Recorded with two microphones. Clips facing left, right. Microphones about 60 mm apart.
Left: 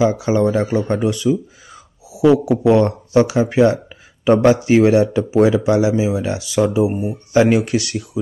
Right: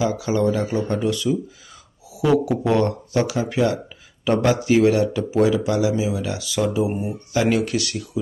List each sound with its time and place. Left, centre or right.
0.0 s a man's voice: left
2.7 s a man's voice: left
6.7 s speech: centre
7.3 s a man's voice: left